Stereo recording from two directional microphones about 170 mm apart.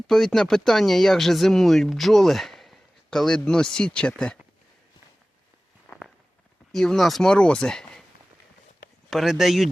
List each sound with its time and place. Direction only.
0.1 s speech: centre (ahead or behind)
5.9 s walk: 15° left (ahead or behind)
6.7 s speech: centre (ahead or behind)
9.0 s speech: centre (ahead or behind)